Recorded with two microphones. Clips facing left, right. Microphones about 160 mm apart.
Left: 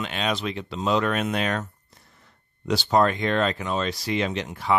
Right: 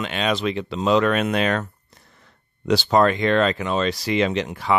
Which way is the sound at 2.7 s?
90° right.